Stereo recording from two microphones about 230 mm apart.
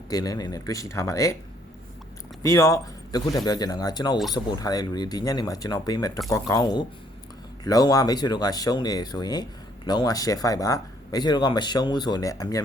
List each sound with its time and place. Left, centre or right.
0.1 s speech: centre
2.4 s speech: centre